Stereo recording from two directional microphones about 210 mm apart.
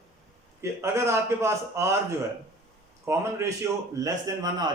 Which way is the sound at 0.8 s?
15° right (ahead or behind).